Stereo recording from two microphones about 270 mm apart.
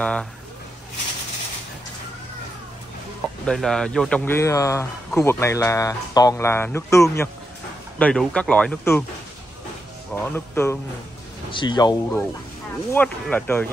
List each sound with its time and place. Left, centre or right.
0.0 s speech: centre
3.4 s speech: centre
10.1 s speech: centre